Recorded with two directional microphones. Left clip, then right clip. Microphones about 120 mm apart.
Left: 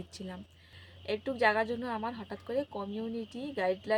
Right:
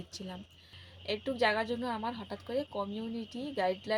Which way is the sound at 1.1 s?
10° left (ahead or behind).